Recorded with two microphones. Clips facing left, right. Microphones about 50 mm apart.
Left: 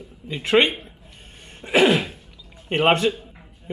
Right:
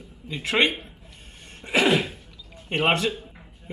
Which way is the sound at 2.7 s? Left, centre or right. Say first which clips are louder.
Left 4 dB; left.